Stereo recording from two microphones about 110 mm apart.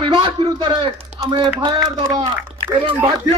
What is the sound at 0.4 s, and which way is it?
Speech, 35° right (ahead or behind).